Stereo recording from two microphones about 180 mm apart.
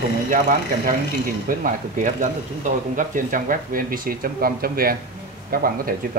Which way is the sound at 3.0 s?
50° right (ahead or behind).